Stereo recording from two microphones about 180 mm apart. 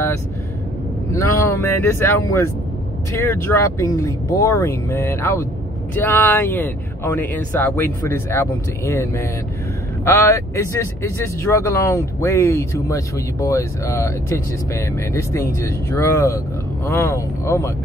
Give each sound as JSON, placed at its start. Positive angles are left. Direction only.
{"t": 1.1, "sound": "speech", "side_deg": 15}